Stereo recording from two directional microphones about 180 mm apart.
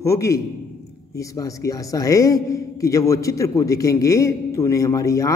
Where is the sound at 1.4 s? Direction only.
20° left (ahead or behind).